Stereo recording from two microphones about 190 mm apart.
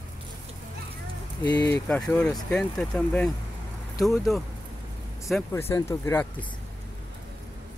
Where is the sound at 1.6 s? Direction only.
10° left (ahead or behind).